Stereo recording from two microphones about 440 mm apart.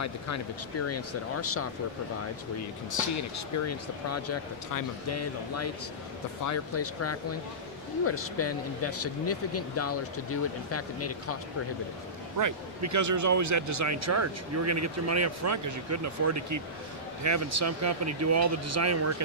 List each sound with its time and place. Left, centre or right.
0.0 s speech: left
3.3 s speech: left
12.4 s speech: right